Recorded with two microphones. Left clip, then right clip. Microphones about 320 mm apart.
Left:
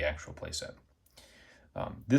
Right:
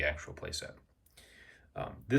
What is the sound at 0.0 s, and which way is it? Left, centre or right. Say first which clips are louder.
Speech: even; centre.